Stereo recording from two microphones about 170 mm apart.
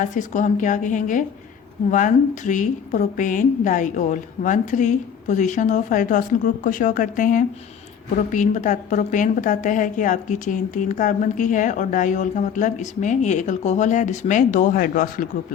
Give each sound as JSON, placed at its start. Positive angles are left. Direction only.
{"t": 0.0, "sound": "a woman's voice", "side_deg": 50}